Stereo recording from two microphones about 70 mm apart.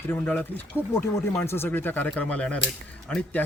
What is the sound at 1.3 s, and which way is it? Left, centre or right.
Speech, left.